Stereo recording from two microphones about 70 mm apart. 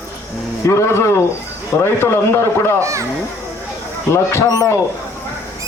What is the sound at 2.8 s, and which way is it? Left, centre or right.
Speech, right.